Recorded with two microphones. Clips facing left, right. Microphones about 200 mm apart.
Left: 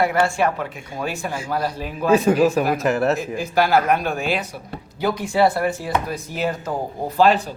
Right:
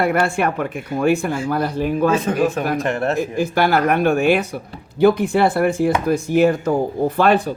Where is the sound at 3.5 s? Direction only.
60° right (ahead or behind).